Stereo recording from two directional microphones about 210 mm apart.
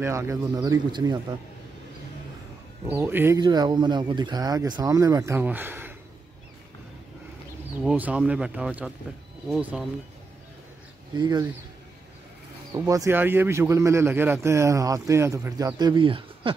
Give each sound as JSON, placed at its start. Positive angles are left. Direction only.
{"t": 0.0, "sound": "a man's voice", "side_deg": -10}
{"t": 2.9, "sound": "a man's voice", "side_deg": -10}
{"t": 7.8, "sound": "speech", "side_deg": -5}
{"t": 11.1, "sound": "speech", "side_deg": -20}
{"t": 12.7, "sound": "a man's voice", "side_deg": -15}